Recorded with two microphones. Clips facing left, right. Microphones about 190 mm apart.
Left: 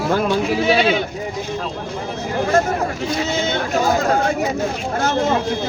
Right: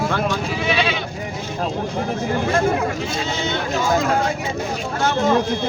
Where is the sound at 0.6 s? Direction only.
40° left (ahead or behind).